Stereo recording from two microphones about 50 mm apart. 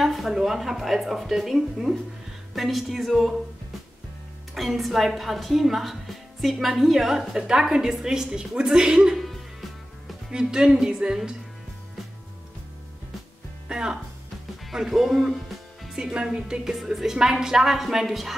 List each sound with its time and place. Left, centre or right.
0.0 s a woman's voice: centre
4.6 s a woman's voice: centre
10.3 s a woman's voice: centre
13.7 s music: centre
16.0 s a woman's voice: centre